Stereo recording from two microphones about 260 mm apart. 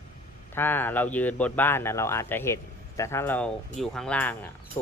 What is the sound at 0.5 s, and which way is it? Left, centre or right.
Speech, centre.